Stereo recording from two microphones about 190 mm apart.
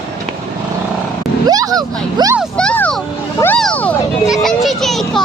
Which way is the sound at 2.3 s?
Centre (ahead or behind).